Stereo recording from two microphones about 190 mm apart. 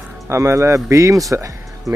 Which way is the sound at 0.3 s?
15° right (ahead or behind).